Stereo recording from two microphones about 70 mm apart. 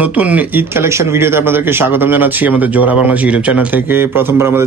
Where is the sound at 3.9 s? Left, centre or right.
Right.